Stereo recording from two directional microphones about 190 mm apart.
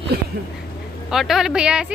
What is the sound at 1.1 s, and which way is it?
Speech, centre (ahead or behind).